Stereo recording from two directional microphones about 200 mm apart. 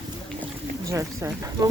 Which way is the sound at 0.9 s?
15° right (ahead or behind).